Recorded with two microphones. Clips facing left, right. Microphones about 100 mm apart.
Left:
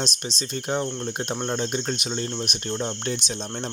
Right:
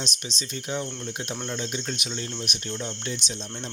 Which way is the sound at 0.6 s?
40° left (ahead or behind).